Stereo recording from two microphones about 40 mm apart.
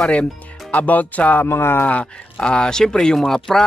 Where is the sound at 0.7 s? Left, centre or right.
Left.